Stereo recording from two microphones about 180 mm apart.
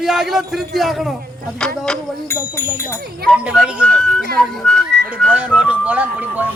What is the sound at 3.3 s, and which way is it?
Speech, 5° right (ahead or behind).